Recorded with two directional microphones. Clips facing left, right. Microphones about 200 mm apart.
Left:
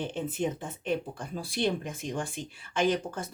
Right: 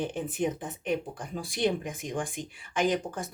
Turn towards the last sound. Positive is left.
turn(degrees=-15)  # may be behind; listen again after turning